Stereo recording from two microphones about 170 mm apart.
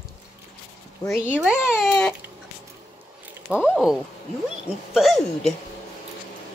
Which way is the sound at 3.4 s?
5° right (ahead or behind).